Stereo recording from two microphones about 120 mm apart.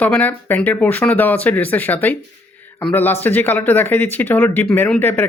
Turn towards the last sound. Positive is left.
turn(degrees=15)  # may be behind; listen again after turning